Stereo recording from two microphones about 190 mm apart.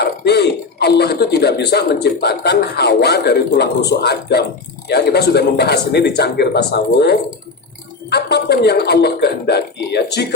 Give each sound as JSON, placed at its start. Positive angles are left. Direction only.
{"t": 0.0, "sound": "speech", "side_deg": 60}